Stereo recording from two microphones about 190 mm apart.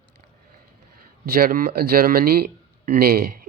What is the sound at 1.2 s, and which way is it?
Speech, 50° right (ahead or behind).